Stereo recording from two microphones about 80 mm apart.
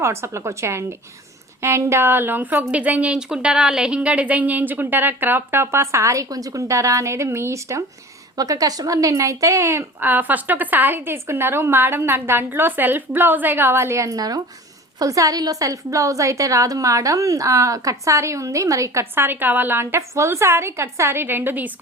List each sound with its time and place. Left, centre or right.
0.0 s a woman's voice: right
8.4 s a woman's voice: right
10.1 s a woman's voice: right
19.1 s a woman's voice: right